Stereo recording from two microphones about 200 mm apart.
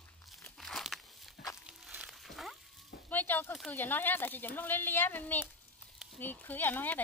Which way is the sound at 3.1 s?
10° left (ahead or behind).